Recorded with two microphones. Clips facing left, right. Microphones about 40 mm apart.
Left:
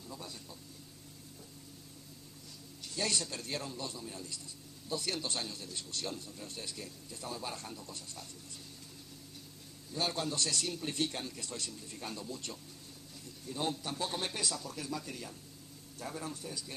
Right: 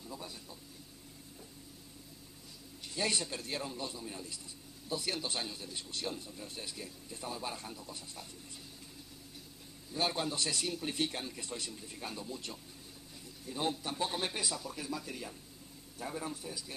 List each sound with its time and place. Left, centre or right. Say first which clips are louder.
0.1 s speech: even; centre
2.8 s a man's voice: right 1 dB; centre
3.3 s a man's voice: right 1 dB; centre
9.9 s a man's voice: right 1 dB; centre